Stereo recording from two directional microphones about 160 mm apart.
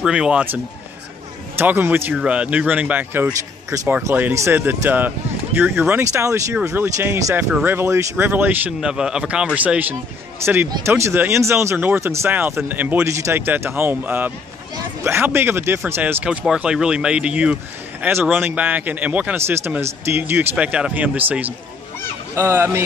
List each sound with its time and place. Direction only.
0.0 s speech: 5° right (ahead or behind)
1.6 s speech: 10° right (ahead or behind)